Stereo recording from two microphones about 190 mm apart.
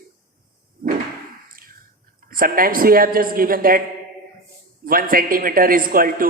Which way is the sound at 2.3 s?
50° right (ahead or behind).